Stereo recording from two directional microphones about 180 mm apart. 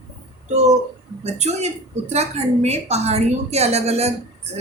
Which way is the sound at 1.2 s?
40° right (ahead or behind).